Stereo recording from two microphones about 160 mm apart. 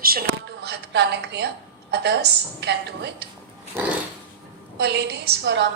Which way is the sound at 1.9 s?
90° right.